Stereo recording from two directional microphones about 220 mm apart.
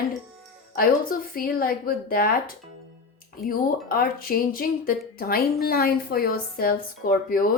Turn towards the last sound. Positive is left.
turn(degrees=40)  # may be behind; listen again after turning